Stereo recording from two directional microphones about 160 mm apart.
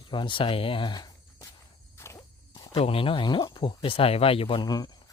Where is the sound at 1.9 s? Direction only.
15° left (ahead or behind).